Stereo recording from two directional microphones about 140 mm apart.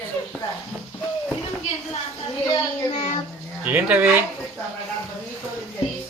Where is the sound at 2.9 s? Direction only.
45° left (ahead or behind).